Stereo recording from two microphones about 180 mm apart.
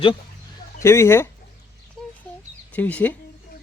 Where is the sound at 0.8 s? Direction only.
15° left (ahead or behind).